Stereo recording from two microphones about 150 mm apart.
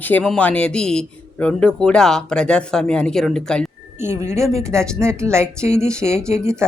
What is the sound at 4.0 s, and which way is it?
A woman's voice, 15° right (ahead or behind).